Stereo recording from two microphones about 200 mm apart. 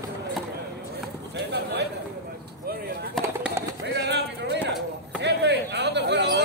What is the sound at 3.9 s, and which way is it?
Music, 60° right (ahead or behind).